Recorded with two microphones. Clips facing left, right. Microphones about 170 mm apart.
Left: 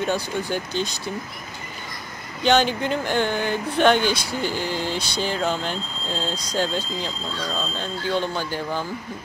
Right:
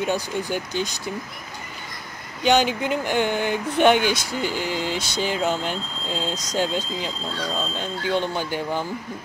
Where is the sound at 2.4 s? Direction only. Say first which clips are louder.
Even; 10° right (ahead or behind).